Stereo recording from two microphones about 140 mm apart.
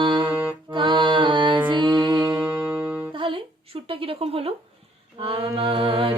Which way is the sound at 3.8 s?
40° right (ahead or behind).